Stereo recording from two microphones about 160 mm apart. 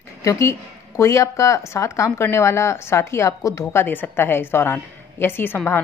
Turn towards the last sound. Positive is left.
turn(degrees=10)  # may be behind; listen again after turning